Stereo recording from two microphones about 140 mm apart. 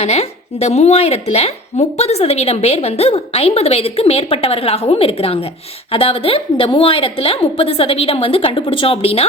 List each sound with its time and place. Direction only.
0.0 s a woman's voice: 50° left (ahead or behind)